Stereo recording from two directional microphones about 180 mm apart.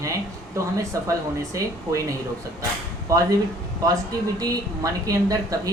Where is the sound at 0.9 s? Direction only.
15° right (ahead or behind).